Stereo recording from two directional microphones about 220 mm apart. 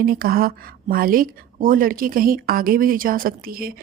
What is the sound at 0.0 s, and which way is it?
Speech, 40° right (ahead or behind).